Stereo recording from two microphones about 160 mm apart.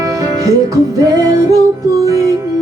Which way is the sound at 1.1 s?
20° right (ahead or behind).